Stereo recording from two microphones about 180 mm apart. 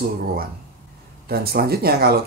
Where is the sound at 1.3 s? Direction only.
60° right (ahead or behind).